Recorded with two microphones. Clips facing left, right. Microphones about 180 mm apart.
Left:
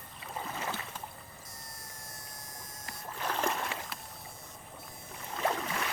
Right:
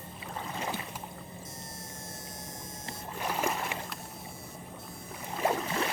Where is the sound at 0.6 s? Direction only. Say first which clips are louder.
Right 2 dB; 15° right (ahead or behind).